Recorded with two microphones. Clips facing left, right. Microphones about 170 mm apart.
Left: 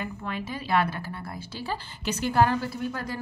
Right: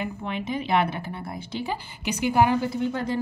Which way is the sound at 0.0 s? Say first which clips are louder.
Right 3 dB; 20° right (ahead or behind).